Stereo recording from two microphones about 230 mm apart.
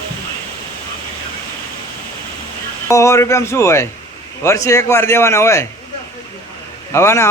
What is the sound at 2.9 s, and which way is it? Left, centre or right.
A man's voice, centre.